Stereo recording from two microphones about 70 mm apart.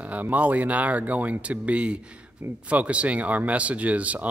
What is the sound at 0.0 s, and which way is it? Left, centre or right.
Speech, right.